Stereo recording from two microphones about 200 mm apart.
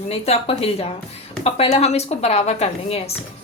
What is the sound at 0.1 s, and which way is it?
A woman's voice, 30° left (ahead or behind).